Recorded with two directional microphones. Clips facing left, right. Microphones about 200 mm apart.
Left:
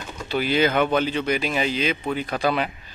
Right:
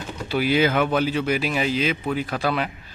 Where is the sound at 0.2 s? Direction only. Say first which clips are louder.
Right 1 dB; 10° right (ahead or behind).